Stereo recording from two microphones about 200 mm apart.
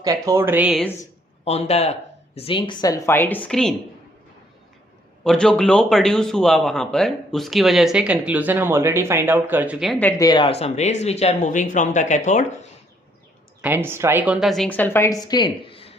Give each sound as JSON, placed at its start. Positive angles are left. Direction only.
{"t": 0.0, "sound": "speech", "side_deg": -15}
{"t": 1.5, "sound": "speech", "side_deg": 30}
{"t": 5.2, "sound": "a man's voice", "side_deg": 5}
{"t": 13.6, "sound": "a woman's voice", "side_deg": -10}